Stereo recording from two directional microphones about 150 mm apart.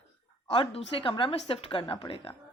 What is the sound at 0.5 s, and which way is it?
A woman's voice, 35° left (ahead or behind).